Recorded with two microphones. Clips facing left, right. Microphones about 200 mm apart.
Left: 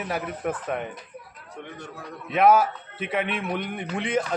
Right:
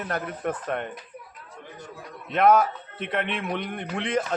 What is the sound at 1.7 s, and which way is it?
Speech, 65° left (ahead or behind).